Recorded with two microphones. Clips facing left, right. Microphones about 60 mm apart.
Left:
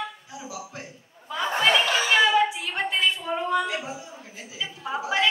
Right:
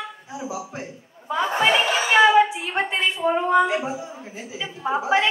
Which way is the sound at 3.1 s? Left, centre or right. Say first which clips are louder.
Right 7 dB; right.